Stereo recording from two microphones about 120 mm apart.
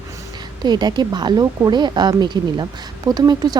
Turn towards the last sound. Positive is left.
turn(degrees=-35)  # may be behind; listen again after turning